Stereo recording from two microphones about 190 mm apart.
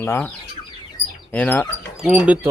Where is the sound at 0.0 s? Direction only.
10° left (ahead or behind).